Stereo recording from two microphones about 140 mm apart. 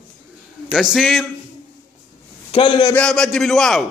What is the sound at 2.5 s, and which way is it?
Speech, 35° left (ahead or behind).